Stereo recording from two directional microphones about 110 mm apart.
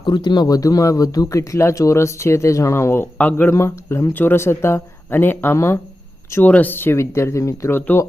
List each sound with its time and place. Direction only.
0.0 s speech: 45° left (ahead or behind); by 8.0 s 20° left (ahead or behind)